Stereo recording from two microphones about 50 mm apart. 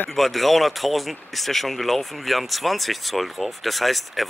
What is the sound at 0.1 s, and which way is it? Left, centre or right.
Speech, centre.